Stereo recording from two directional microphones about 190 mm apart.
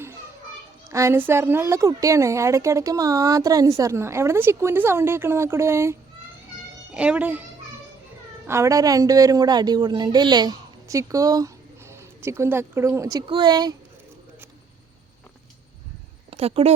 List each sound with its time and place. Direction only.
0.9 s a woman's voice: 15° right (ahead or behind)
8.4 s a woman's voice: 15° right (ahead or behind)
16.3 s speech: 30° right (ahead or behind)